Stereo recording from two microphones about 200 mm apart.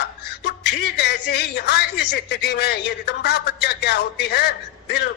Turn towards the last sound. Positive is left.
turn(degrees=55)  # may be behind; listen again after turning